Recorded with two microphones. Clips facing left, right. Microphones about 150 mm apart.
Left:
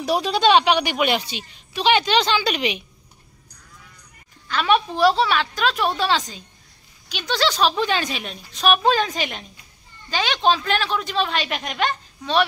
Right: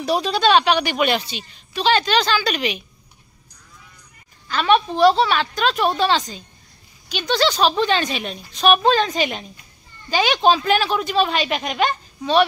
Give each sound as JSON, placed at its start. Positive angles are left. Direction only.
{"t": 0.0, "sound": "speech", "side_deg": 15}
{"t": 4.5, "sound": "speech", "side_deg": 5}